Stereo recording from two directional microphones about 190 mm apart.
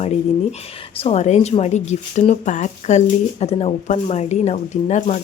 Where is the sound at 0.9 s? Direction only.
35° left (ahead or behind).